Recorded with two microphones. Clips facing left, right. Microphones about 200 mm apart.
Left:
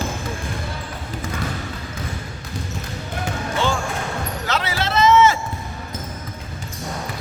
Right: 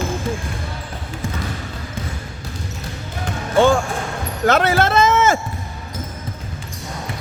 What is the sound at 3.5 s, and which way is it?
Basketball bounce, 55° right (ahead or behind).